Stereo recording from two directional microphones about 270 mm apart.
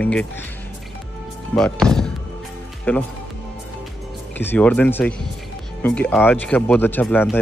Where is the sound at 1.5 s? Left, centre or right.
Centre.